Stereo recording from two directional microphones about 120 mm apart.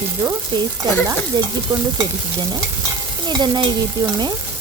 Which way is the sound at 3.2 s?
35° right (ahead or behind).